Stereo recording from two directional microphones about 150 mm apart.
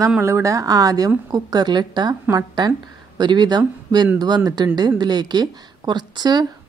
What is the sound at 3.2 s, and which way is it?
A woman's voice, 30° right (ahead or behind).